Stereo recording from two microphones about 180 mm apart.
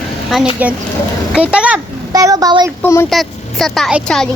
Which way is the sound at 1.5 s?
5° right (ahead or behind).